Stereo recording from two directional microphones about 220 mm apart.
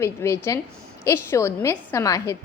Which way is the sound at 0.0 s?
10° left (ahead or behind).